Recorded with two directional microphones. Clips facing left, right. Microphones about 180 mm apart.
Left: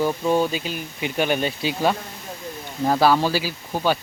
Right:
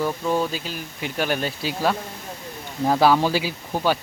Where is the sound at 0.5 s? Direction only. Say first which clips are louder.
Left 3 dB; 60° left (ahead or behind).